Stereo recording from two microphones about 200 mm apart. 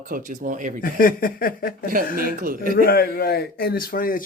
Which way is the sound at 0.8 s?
45° left (ahead or behind).